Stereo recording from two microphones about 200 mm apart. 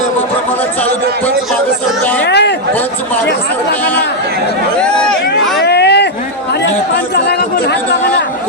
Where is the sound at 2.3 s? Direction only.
60° left (ahead or behind).